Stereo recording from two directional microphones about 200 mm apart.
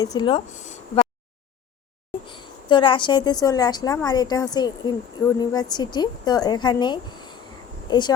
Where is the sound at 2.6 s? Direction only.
25° left (ahead or behind).